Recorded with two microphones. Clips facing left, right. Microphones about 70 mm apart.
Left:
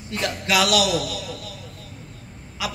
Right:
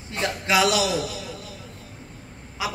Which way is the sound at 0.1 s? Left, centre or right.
Right.